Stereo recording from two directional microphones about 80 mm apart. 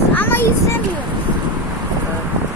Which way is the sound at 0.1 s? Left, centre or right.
Left.